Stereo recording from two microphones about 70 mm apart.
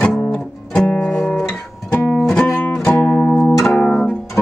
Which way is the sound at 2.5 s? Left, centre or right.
Centre.